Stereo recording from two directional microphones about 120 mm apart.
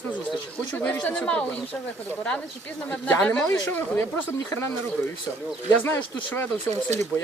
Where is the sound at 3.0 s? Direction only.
10° left (ahead or behind).